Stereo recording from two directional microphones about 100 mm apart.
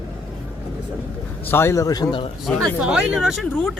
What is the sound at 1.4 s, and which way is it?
Speech, 25° left (ahead or behind).